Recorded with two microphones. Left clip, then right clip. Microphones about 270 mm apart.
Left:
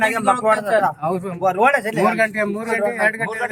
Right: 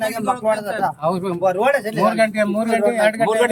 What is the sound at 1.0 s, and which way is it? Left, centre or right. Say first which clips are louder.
Speech: right 2 dB; right.